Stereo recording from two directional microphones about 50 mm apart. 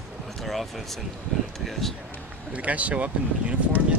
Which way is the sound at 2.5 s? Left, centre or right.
Right.